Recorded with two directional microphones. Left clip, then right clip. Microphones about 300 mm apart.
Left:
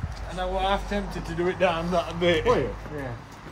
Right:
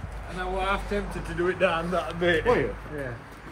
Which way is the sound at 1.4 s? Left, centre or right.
Left.